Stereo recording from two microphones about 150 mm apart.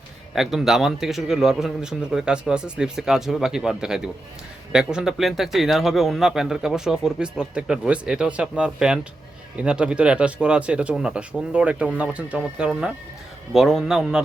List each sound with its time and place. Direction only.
0.3 s a man's voice: centre (ahead or behind)